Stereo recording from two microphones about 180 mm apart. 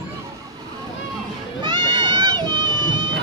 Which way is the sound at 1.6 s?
25° right (ahead or behind).